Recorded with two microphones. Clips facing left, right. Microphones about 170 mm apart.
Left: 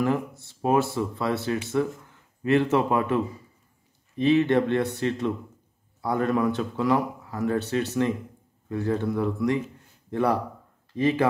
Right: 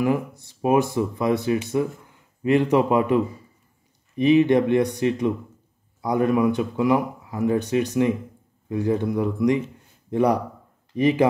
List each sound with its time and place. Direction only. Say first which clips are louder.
0.0 s speech: right 3 dB; 15° right (ahead or behind)
4.2 s speech: right 4 dB; 15° right (ahead or behind)